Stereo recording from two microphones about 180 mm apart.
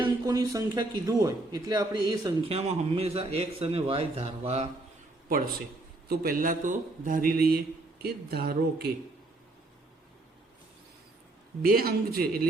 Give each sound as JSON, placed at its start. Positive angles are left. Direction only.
{"t": 0.0, "sound": "a man's voice", "side_deg": -20}
{"t": 2.5, "sound": "a man's voice", "side_deg": -35}
{"t": 6.1, "sound": "speech", "side_deg": -50}
{"t": 11.6, "sound": "speech", "side_deg": -55}